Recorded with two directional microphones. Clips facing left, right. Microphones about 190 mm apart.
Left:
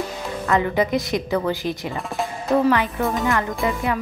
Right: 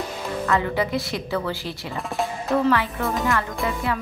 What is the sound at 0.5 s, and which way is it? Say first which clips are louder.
Speech: left 4 dB; 20° left (ahead or behind).